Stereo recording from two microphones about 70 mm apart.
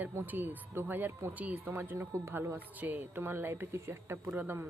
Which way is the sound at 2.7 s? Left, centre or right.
Right.